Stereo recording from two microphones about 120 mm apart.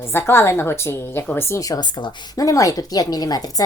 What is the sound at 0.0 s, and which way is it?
A woman's voice, 20° left (ahead or behind).